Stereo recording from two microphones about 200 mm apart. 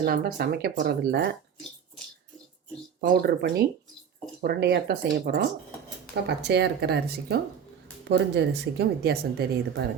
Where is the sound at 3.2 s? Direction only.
50° right (ahead or behind).